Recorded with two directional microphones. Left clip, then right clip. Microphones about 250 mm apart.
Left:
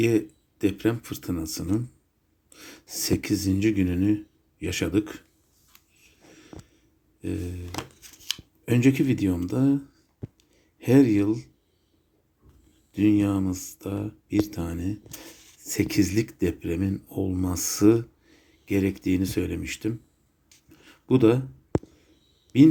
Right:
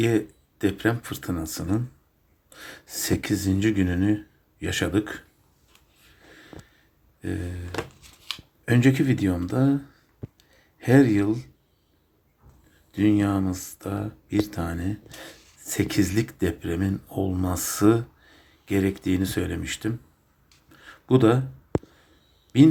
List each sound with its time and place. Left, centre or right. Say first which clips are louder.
0.0 s speech: even; centre
6.1 s sniff: right 2 dB; centre
7.2 s speech: even; centre
8.0 s scissors: left 2 dB; left
8.6 s speech: right 1 dB; centre
12.9 s speech: even; centre
20.7 s a sound: right 1 dB; centre